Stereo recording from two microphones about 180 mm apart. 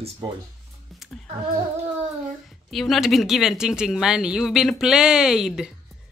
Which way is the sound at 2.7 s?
Centre (ahead or behind).